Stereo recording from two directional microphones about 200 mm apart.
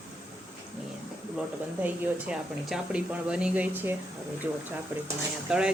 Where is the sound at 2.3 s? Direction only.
5° right (ahead or behind).